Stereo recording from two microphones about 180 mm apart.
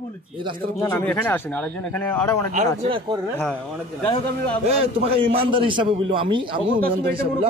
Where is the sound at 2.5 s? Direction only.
40° right (ahead or behind).